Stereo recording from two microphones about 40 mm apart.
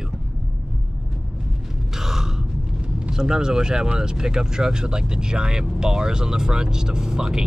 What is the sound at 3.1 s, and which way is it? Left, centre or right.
Speech, centre.